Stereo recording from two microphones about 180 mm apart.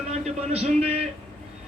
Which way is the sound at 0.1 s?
35° right (ahead or behind).